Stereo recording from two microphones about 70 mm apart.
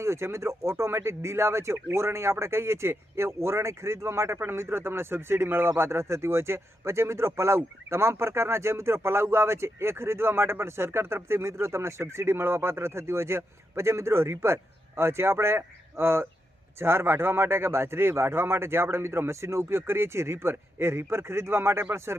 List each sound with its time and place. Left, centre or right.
0.0 s speech: right